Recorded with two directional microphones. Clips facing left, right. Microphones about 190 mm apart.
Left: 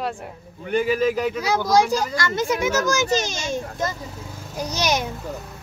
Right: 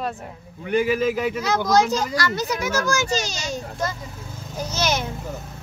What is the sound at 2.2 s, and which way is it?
A child's voice, 25° left (ahead or behind).